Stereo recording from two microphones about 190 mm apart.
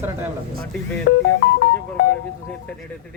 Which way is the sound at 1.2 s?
50° left (ahead or behind).